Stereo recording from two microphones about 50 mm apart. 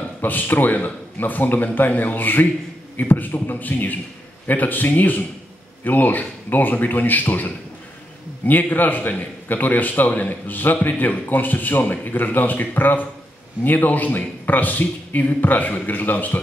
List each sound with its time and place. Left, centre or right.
0.2 s a man's voice: left